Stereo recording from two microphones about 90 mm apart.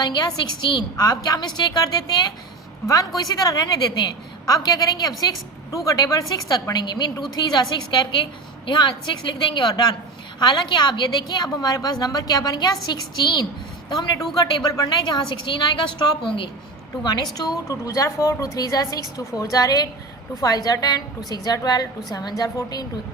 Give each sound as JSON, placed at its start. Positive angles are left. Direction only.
{"t": 0.0, "sound": "a woman's voice", "side_deg": 50}
{"t": 8.6, "sound": "a woman's voice", "side_deg": 65}
{"t": 17.0, "sound": "a woman's voice", "side_deg": 55}
{"t": 17.3, "sound": "a woman's voice", "side_deg": 40}